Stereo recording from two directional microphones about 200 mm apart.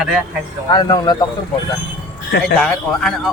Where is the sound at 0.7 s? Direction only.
20° left (ahead or behind).